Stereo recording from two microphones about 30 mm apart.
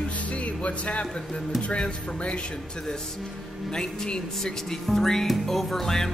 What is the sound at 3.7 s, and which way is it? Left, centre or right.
Speech, left.